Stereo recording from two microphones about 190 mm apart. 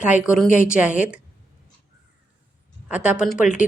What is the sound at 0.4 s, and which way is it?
Speech, 45° left (ahead or behind).